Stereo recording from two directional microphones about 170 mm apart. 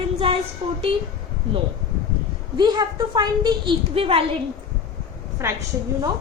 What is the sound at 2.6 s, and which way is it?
A woman's voice, 25° right (ahead or behind).